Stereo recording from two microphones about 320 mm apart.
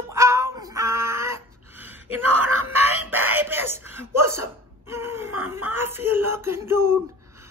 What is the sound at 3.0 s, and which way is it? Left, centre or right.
Speech, centre.